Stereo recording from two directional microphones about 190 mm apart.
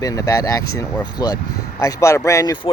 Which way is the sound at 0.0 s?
15° left (ahead or behind).